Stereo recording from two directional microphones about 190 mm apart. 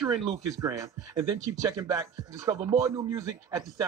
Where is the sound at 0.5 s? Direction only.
15° right (ahead or behind).